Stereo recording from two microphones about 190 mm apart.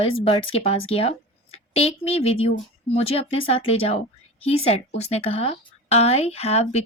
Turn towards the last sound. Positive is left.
turn(degrees=35)  # may be behind; listen again after turning